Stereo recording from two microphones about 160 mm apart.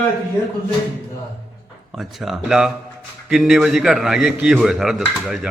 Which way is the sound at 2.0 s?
5° right (ahead or behind).